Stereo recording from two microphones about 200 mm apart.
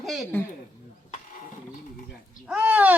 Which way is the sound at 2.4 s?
5° right (ahead or behind).